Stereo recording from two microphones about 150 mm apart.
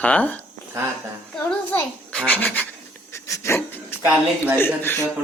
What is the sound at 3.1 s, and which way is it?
Dog, 20° left (ahead or behind).